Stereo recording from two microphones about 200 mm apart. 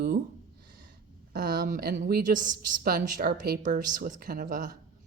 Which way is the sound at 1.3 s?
45° right (ahead or behind).